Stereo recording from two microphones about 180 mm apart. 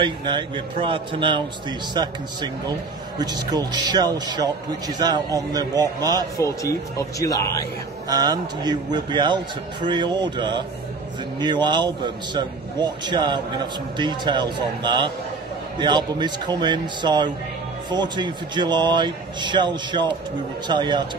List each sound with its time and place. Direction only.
0.0 s a man's voice: 25° right (ahead or behind)
3.2 s a man's voice: 20° right (ahead or behind)
6.4 s speech: 20° left (ahead or behind)
8.1 s a man's voice: 25° right (ahead or behind)